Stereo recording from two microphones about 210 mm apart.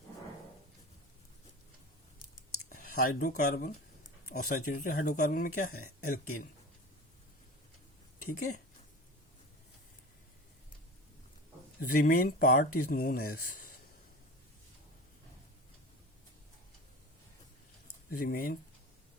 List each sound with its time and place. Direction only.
2.6 s speech: 40° left (ahead or behind)
11.8 s speech: 45° left (ahead or behind)
18.1 s speech: 45° left (ahead or behind)